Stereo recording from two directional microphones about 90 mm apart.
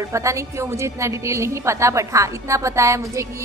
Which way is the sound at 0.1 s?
35° right (ahead or behind).